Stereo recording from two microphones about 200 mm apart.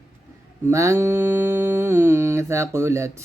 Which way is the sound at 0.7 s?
15° right (ahead or behind).